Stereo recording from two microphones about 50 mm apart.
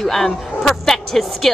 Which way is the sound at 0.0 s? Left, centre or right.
Centre.